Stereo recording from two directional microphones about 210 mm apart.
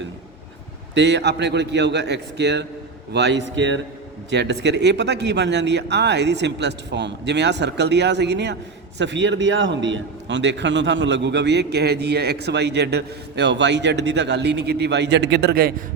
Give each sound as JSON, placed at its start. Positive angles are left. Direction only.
{"t": 0.9, "sound": "a man's voice", "side_deg": -55}